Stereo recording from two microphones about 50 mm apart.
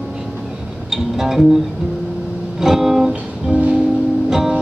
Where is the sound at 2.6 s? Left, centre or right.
Centre.